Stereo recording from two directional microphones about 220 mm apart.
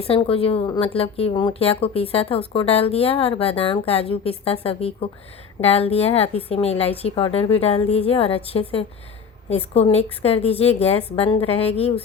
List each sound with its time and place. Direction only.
0.1 s speech: 25° left (ahead or behind)